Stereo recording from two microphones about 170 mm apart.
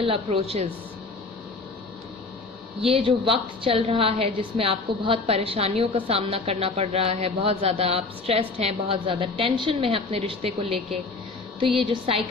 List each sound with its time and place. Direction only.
0.0 s a woman's voice: 35° right (ahead or behind)
2.8 s a woman's voice: 35° right (ahead or behind)